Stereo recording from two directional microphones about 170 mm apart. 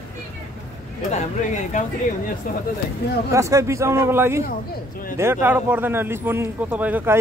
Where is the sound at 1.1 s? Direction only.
45° left (ahead or behind).